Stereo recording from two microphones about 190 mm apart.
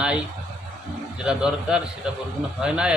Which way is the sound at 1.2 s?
5° right (ahead or behind).